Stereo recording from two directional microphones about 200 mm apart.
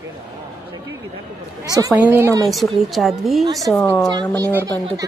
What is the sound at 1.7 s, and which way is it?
Speech, 20° right (ahead or behind).